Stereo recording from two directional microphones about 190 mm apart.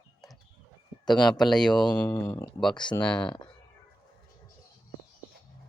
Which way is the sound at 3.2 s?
25° left (ahead or behind).